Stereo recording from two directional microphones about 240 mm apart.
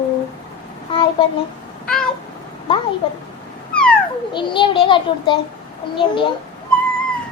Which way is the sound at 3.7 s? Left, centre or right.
Centre.